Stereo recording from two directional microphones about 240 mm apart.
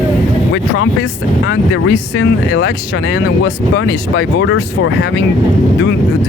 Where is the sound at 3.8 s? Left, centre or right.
Left.